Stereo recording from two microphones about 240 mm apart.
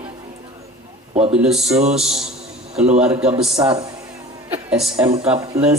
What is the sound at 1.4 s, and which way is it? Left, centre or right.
Speech, centre.